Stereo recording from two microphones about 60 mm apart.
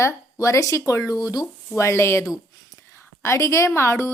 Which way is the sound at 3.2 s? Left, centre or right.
Left.